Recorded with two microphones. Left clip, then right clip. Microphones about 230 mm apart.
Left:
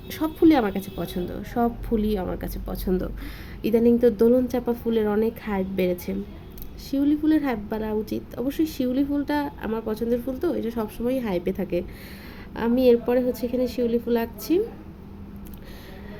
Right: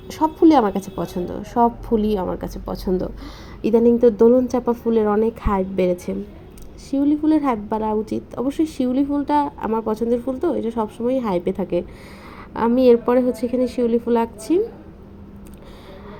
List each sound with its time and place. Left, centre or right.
0.1 s a woman's voice: centre